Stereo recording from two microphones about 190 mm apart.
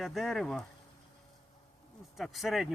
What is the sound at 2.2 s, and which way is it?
Speech, centre (ahead or behind).